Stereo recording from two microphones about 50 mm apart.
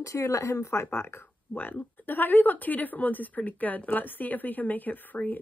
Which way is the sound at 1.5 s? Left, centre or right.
Left.